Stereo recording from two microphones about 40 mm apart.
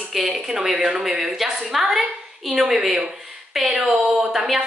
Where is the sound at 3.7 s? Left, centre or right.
Right.